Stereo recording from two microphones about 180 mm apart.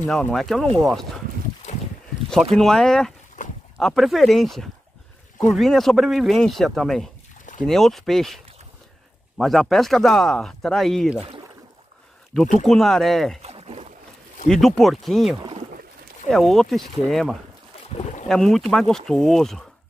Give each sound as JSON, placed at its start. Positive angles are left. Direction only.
{"t": 0.0, "sound": "speech", "side_deg": 0}
{"t": 2.5, "sound": "speech", "side_deg": 5}
{"t": 3.4, "sound": "livestock", "side_deg": 45}
{"t": 3.8, "sound": "speech", "side_deg": 0}
{"t": 9.4, "sound": "speech", "side_deg": 0}
{"t": 12.6, "sound": "speech", "side_deg": 0}
{"t": 13.4, "sound": "boat", "side_deg": -35}
{"t": 14.5, "sound": "speech", "side_deg": 0}
{"t": 17.9, "sound": "speech", "side_deg": 40}
{"t": 18.3, "sound": "speech", "side_deg": 0}